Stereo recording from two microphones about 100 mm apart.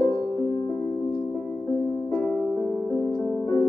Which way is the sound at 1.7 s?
45° left (ahead or behind).